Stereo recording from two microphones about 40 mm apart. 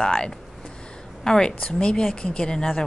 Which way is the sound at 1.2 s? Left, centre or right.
Centre.